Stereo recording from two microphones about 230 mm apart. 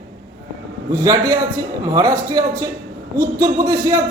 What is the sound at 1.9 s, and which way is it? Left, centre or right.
A man's voice, centre.